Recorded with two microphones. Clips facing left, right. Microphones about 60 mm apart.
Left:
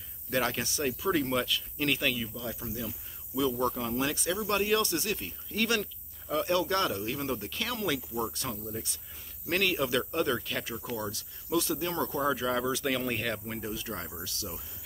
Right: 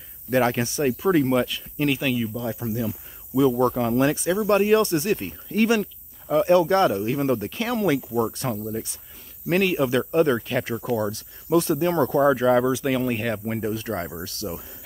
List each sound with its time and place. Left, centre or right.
0.3 s speech: right
1.9 s speech: centre
2.1 s speech: right
3.5 s speech: right
4.1 s speech: right
6.2 s speech: right
7.2 s speech: right
7.5 s speech: right
10.6 s speech: right
11.0 s speech: right
12.7 s speech: centre
13.5 s speech: right